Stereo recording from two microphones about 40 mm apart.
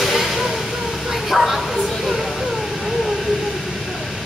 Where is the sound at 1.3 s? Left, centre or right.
Centre.